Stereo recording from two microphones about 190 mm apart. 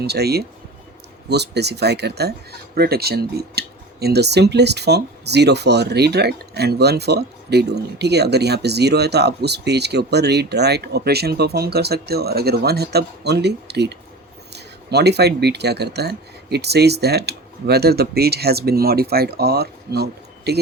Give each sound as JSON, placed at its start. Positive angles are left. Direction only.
{"t": 0.0, "sound": "speech", "side_deg": -60}